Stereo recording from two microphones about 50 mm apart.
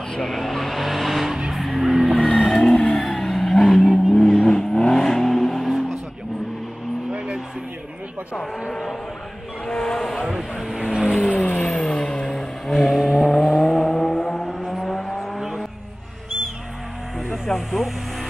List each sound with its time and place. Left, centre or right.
0.2 s vehicle: centre
1.5 s music: centre
2.4 s vehicle: centre
7.1 s vehicle: centre
9.7 s vehicle: centre
10.8 s vehicle: centre
11.4 s vehicle: left; by 15.6 s centre
17.2 s vehicle: centre